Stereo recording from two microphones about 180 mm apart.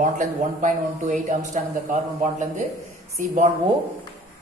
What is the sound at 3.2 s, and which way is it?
Speech, 45° right (ahead or behind).